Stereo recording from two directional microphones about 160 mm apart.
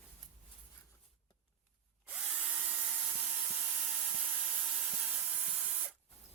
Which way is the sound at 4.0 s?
5° right (ahead or behind).